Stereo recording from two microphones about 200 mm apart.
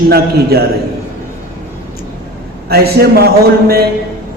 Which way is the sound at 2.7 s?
50° right (ahead or behind).